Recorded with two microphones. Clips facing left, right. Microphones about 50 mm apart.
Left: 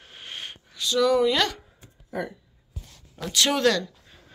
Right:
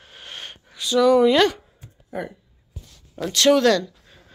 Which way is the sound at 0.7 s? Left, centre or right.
Centre.